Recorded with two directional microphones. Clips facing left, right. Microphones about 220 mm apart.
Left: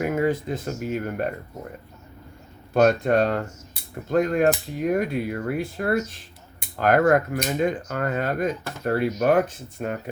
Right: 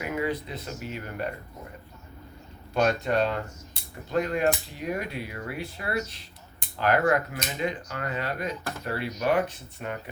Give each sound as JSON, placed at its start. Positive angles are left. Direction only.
{"t": 0.0, "sound": "speech", "side_deg": 45}
{"t": 2.7, "sound": "speech", "side_deg": 50}